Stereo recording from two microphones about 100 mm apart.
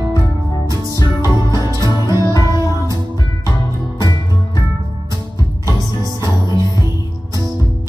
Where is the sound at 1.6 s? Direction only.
35° right (ahead or behind).